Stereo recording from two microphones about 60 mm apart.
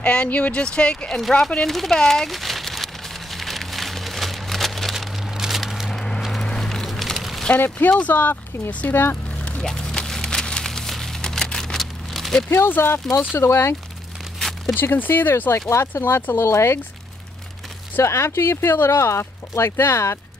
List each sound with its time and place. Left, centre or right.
0.0 s speech: left
1.8 s rain on surface: centre
5.3 s a sound: centre
5.9 s a sound: centre
8.0 s speech: left
8.9 s speech: left
9.4 s a sound: centre
12.4 s speech: left
14.7 s speech: left
15.9 s speech: left
18.0 s speech: left